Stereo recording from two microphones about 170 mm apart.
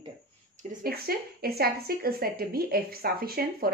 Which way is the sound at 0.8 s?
65° right (ahead or behind).